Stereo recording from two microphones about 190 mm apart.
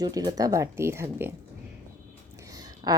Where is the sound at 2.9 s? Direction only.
20° right (ahead or behind).